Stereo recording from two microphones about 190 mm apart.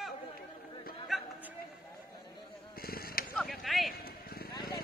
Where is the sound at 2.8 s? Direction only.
55° left (ahead or behind).